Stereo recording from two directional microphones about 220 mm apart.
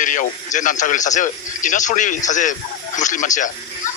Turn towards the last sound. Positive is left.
turn(degrees=35)  # may be behind; listen again after turning